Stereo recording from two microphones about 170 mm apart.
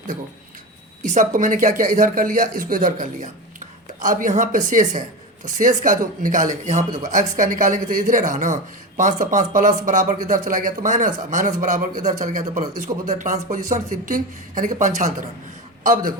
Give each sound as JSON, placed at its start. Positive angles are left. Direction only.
{"t": 1.0, "sound": "speech", "side_deg": -50}